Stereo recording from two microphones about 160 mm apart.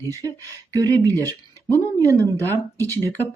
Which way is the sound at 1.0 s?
20° right (ahead or behind).